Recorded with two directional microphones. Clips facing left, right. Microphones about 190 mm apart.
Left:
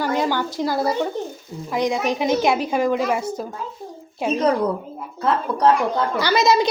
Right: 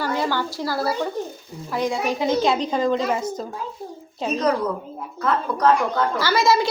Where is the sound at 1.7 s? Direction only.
15° left (ahead or behind).